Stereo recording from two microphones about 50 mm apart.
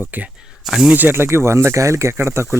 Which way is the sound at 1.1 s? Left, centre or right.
Right.